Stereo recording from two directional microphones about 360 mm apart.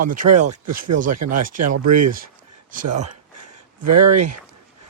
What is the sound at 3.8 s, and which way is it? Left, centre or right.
Speech, right.